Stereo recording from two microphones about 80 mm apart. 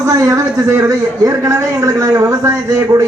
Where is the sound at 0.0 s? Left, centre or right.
Right.